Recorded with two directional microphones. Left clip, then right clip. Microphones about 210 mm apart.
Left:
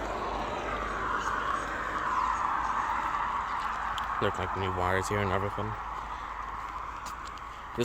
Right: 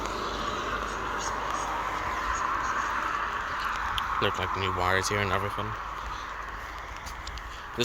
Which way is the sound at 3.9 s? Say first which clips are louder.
Right 3 dB; 20° left (ahead or behind).